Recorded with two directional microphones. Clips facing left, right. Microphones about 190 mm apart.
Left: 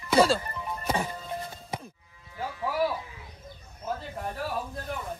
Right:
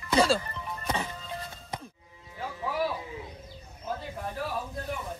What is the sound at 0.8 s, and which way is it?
Music, 10° left (ahead or behind).